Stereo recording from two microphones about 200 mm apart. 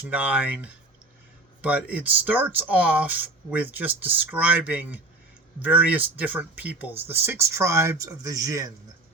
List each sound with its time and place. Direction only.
0.1 s speech: 5° right (ahead or behind)